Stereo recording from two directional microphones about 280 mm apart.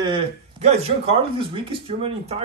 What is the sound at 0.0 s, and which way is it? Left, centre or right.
Speech, centre.